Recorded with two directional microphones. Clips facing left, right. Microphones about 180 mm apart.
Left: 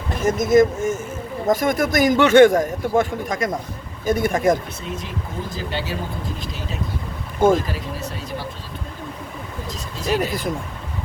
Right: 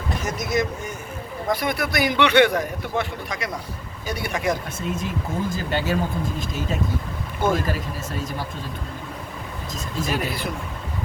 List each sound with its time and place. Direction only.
0.2 s a man's voice: 50° left (ahead or behind)
4.9 s speech: 50° right (ahead or behind)
7.3 s speech: 50° left (ahead or behind)
10.1 s a man's voice: 45° left (ahead or behind)